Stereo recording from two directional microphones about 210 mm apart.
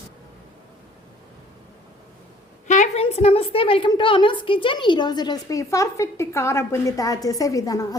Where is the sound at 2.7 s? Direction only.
30° left (ahead or behind).